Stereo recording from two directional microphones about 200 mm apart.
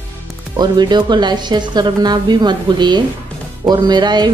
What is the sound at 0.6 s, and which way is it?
Speech, 20° right (ahead or behind).